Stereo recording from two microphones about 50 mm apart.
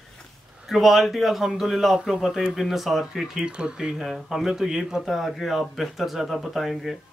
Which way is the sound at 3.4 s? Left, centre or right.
Centre.